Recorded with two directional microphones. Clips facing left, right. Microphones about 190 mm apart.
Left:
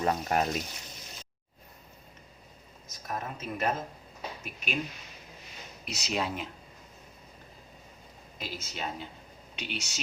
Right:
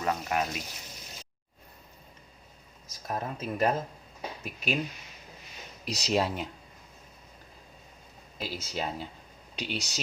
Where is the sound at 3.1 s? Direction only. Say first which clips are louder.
Right 3 dB; 30° right (ahead or behind).